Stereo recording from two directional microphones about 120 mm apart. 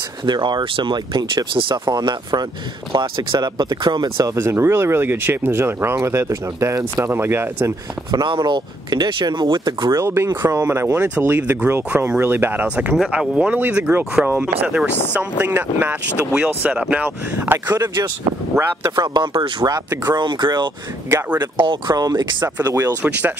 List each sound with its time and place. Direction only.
0.2 s speech: 40° right (ahead or behind)
1.9 s speech: 35° right (ahead or behind)
8.1 s speech: 40° right (ahead or behind)
9.9 s speech: 20° right (ahead or behind)
18.9 s speech: 35° right (ahead or behind)
23.0 s speech: 10° right (ahead or behind)